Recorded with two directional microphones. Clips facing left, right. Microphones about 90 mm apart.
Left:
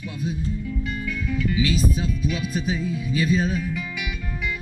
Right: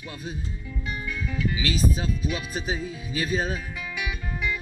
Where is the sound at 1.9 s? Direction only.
40° right (ahead or behind).